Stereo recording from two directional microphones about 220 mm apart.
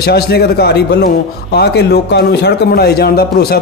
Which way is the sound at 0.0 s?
45° left (ahead or behind).